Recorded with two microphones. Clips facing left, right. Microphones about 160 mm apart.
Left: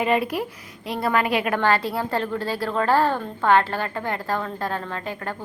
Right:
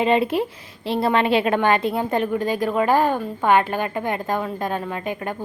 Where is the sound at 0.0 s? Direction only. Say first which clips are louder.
Right 3 dB; 25° right (ahead or behind).